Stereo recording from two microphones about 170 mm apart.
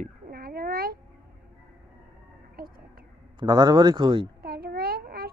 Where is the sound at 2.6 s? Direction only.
60° right (ahead or behind).